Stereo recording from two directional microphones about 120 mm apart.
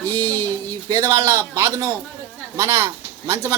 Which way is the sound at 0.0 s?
30° right (ahead or behind).